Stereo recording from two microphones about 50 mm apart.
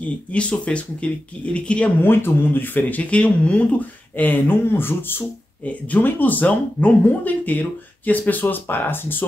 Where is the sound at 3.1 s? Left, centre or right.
Left.